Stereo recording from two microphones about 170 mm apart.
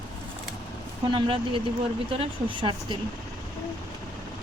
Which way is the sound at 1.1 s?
30° right (ahead or behind).